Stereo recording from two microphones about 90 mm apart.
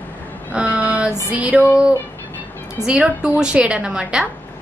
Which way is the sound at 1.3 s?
15° right (ahead or behind).